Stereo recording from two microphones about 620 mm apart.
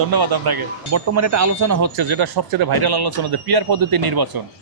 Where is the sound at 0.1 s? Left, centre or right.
Right.